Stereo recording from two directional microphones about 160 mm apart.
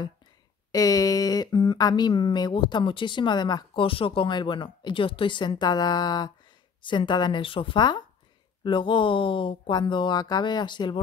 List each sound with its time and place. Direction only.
0.7 s speech: 20° left (ahead or behind)